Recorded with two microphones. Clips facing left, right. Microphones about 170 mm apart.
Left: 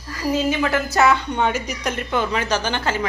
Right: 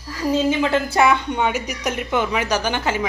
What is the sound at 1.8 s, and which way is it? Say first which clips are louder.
A woman's voice: right 3 dB; 15° right (ahead or behind).